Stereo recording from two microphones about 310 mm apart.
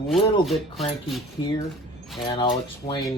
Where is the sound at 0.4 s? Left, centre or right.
Centre.